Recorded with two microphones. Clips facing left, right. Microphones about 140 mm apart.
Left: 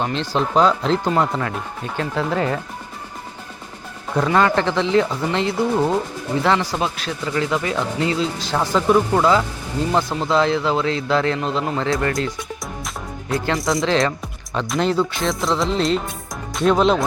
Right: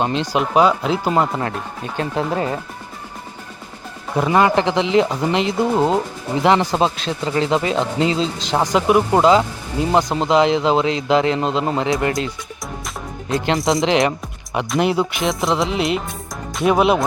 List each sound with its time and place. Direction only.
0.0 s speech: 15° right (ahead or behind)
2.0 s speech: 25° right (ahead or behind)
4.1 s speech: 15° right (ahead or behind)
13.3 s speech: 20° right (ahead or behind)